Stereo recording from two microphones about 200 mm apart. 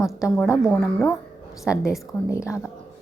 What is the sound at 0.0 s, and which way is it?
Speech, 15° left (ahead or behind).